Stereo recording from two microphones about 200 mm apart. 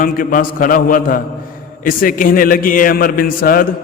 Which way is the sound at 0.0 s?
45° left (ahead or behind).